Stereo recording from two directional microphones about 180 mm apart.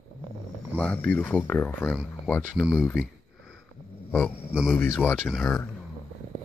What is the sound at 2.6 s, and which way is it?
Speech, centre (ahead or behind).